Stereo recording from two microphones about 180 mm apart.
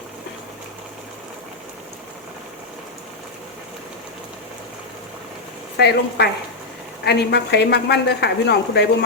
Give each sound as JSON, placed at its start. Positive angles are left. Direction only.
{"t": 5.7, "sound": "a woman's voice", "side_deg": 65}